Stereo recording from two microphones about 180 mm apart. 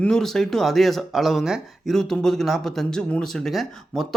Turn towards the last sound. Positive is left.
turn(degrees=0)  # may be behind; listen again after turning